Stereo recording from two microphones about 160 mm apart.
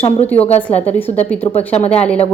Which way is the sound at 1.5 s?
40° left (ahead or behind).